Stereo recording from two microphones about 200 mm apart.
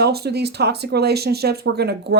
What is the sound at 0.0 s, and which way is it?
Speech, 55° right (ahead or behind).